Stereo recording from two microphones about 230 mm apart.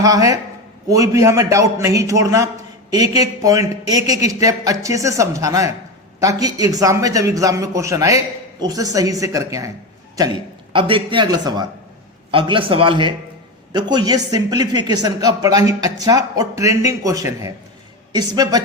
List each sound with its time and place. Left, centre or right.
0.0 s a man's voice: centre